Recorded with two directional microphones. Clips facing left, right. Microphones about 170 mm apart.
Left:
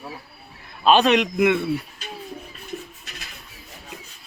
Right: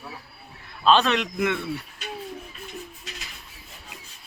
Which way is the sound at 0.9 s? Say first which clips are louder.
Left 4 dB; 15° left (ahead or behind).